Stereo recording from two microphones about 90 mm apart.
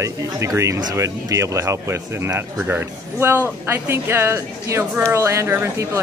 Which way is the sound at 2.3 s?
15° right (ahead or behind).